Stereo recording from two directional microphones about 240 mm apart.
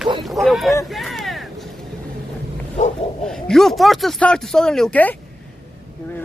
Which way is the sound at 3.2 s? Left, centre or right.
Centre.